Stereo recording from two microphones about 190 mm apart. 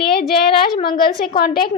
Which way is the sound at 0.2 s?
25° left (ahead or behind).